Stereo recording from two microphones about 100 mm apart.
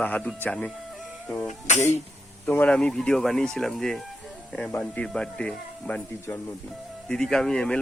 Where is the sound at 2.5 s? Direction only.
15° left (ahead or behind).